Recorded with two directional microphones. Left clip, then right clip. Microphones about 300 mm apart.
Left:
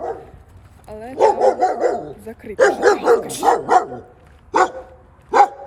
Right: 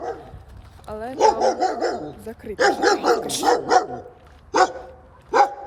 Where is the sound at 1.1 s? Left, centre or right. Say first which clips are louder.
Left 3 dB; left.